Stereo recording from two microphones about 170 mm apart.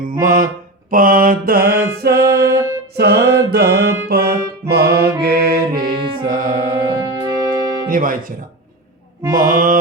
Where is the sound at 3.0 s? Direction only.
70° right (ahead or behind).